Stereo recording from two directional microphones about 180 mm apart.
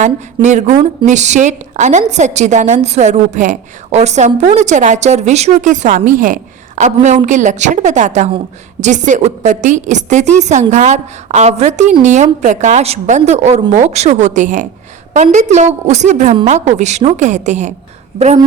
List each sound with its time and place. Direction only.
0.4 s speech: 40° right (ahead or behind)